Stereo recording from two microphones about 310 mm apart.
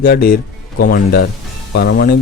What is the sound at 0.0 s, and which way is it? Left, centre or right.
Speech, left.